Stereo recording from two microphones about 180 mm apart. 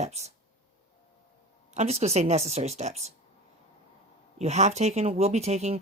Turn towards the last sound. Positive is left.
turn(degrees=-35)  # may be behind; listen again after turning